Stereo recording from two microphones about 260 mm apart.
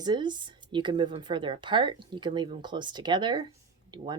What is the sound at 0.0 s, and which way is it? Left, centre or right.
Speech, centre.